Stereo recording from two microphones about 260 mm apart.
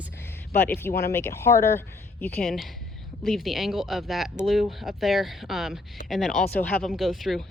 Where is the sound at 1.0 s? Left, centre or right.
Centre.